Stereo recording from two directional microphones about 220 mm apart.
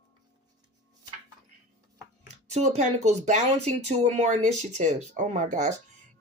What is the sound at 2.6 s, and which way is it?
Speech, 30° right (ahead or behind).